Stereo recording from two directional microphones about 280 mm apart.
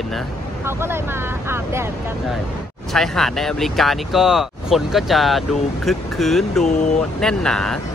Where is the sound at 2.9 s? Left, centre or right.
Centre.